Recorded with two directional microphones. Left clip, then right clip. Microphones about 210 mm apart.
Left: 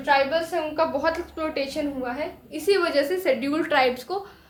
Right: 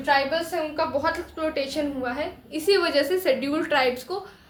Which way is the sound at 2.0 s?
5° left (ahead or behind).